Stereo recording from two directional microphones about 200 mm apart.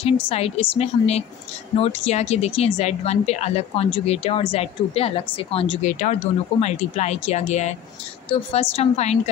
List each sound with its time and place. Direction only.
0.0 s a woman's voice: 30° left (ahead or behind)